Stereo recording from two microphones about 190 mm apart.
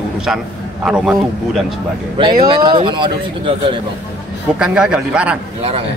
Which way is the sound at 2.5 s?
25° right (ahead or behind).